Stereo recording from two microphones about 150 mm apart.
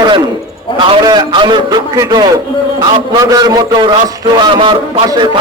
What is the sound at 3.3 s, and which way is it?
A man's voice, 25° right (ahead or behind).